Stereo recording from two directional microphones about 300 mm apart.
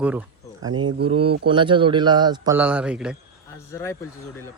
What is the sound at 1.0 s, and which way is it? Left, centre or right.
Speech, centre.